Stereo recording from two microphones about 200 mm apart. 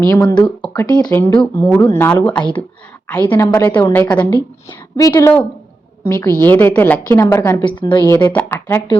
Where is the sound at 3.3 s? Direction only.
15° left (ahead or behind).